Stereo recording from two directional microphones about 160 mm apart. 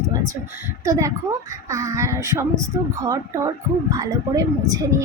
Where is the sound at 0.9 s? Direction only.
20° right (ahead or behind).